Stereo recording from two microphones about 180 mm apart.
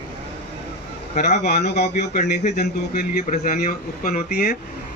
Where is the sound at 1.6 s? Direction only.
65° left (ahead or behind).